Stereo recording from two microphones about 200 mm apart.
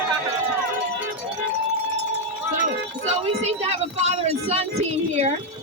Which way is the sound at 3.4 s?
35° right (ahead or behind).